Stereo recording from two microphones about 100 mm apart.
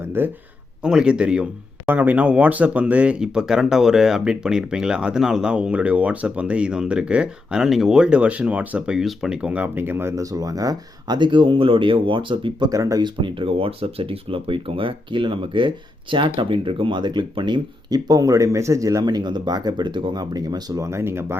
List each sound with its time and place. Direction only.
0.0 s a sound: 20° right (ahead or behind)
0.8 s speech: 10° right (ahead or behind); by 10.2 s 25° right (ahead or behind)
10.3 s speech: 35° right (ahead or behind); by 12.6 s 55° right (ahead or behind)
12.6 s speech: 35° right (ahead or behind)
13.1 s speech: 60° right (ahead or behind); by 21.3 s 25° right (ahead or behind)